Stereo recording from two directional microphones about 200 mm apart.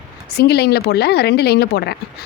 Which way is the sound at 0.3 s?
55° left (ahead or behind).